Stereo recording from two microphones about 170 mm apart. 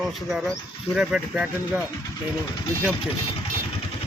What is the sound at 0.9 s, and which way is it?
Speech, 5° right (ahead or behind).